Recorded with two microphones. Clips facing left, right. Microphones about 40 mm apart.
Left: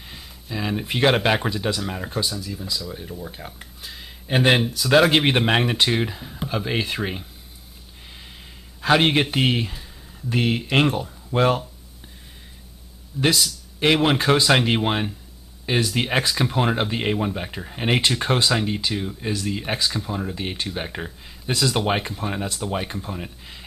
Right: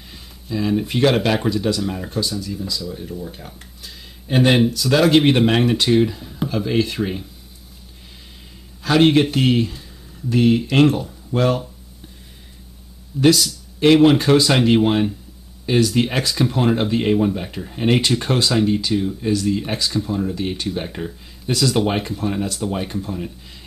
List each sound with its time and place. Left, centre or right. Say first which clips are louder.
0.1 s speech: right 5 dB; centre
4.6 s speech: right 6 dB; centre
4.8 s a man's voice: right 1 dB; centre
8.8 s a man's voice: right 4 dB; left
13.1 s speech: right 6 dB; centre
13.7 s speech: right 6 dB; centre